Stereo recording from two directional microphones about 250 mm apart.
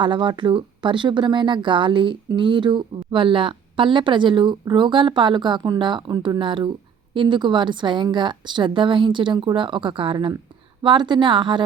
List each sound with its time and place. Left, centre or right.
0.0 s speech: centre